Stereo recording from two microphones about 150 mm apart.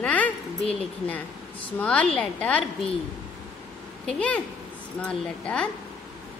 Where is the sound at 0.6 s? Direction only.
40° left (ahead or behind).